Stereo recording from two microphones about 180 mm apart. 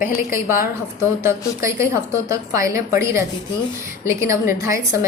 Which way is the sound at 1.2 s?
15° right (ahead or behind).